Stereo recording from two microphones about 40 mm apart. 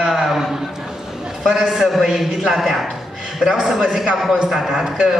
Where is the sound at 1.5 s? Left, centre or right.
Centre.